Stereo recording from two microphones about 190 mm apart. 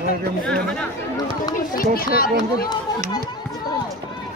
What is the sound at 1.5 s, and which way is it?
Speech, 50° left (ahead or behind).